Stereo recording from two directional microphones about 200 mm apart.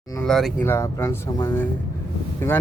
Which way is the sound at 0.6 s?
15° left (ahead or behind).